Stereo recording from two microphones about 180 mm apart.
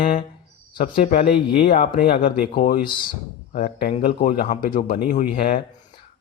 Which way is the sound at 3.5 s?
45° left (ahead or behind).